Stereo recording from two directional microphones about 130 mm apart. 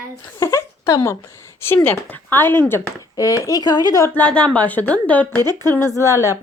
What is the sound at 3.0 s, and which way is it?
Speech, 25° left (ahead or behind).